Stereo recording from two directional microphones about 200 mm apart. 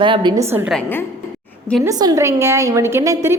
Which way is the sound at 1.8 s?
20° right (ahead or behind).